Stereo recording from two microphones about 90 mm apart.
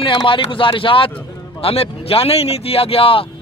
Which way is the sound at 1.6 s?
90° left.